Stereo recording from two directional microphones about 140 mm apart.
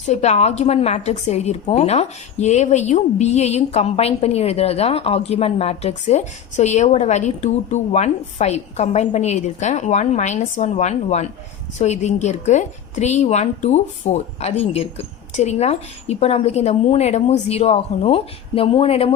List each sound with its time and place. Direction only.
0.0 s a woman's voice: 55° left (ahead or behind)